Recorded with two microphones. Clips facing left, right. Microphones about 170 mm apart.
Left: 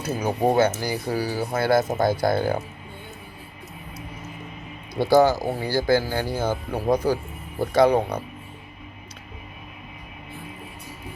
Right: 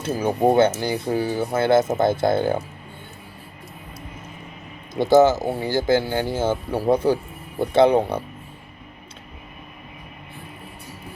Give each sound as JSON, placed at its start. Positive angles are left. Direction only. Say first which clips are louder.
{"t": 0.0, "sound": "speech", "louder": "right 3 dB", "side_deg": -30}
{"t": 4.9, "sound": "speech", "louder": "right 2 dB", "side_deg": -20}